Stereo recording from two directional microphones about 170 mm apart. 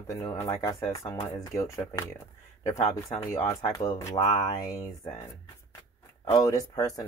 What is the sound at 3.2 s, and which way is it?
Speech, 20° left (ahead or behind).